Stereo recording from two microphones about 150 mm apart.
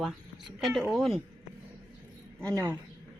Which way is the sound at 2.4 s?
20° right (ahead or behind).